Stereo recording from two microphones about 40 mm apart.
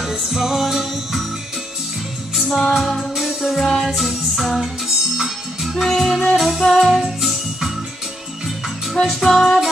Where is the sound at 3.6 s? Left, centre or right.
Centre.